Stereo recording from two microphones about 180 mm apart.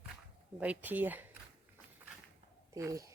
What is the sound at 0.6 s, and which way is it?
Speech, 10° right (ahead or behind).